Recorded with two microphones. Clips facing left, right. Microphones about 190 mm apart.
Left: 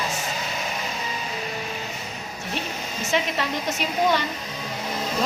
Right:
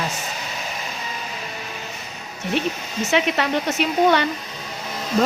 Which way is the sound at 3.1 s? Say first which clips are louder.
Right 5 dB; 65° right (ahead or behind).